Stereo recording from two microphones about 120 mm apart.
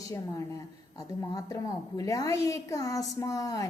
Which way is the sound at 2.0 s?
30° left (ahead or behind).